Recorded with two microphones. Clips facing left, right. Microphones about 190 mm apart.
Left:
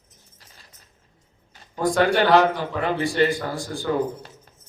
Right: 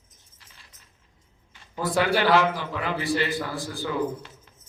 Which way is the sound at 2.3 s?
40° left (ahead or behind).